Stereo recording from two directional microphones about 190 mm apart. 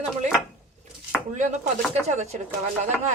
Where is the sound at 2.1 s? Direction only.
35° right (ahead or behind).